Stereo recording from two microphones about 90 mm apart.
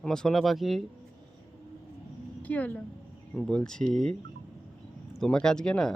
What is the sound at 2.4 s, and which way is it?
Speech, 15° left (ahead or behind).